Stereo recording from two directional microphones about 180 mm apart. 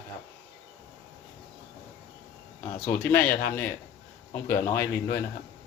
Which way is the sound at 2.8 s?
10° left (ahead or behind).